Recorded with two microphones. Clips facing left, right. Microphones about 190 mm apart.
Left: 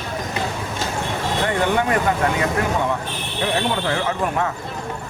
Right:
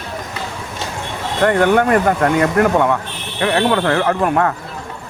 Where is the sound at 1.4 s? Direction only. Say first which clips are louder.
Right 8 dB; 55° right (ahead or behind).